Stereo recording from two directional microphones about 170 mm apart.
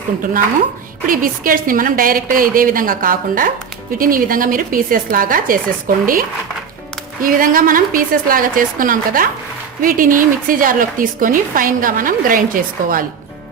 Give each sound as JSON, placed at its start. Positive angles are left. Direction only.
{"t": 1.0, "sound": "a woman's voice", "side_deg": -55}
{"t": 7.2, "sound": "a woman's voice", "side_deg": -55}